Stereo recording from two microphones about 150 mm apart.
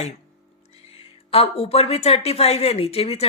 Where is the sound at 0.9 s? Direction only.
40° left (ahead or behind).